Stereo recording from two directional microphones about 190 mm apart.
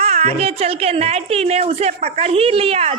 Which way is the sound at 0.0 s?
30° right (ahead or behind).